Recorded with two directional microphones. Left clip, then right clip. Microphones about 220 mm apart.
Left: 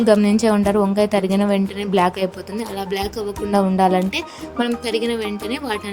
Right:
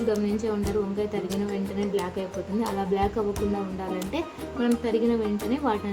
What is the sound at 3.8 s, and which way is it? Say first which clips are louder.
Speech: left 13 dB; 50° left (ahead or behind).